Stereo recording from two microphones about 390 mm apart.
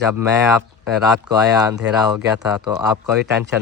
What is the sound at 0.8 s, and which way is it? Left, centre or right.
Speech, centre.